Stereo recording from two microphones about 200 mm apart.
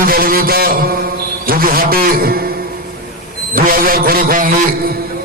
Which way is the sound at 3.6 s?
45° right (ahead or behind).